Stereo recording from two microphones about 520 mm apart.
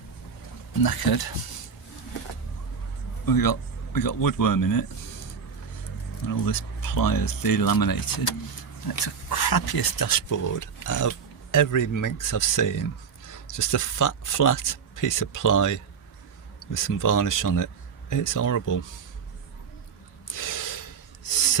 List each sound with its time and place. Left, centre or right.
0.8 s speech: left
3.2 s speech: left
6.2 s speech: left
20.2 s snort: left